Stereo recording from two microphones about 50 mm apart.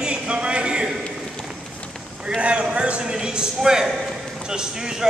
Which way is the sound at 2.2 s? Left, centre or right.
Right.